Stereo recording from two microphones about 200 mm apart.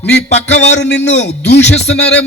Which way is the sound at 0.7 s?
60° left (ahead or behind).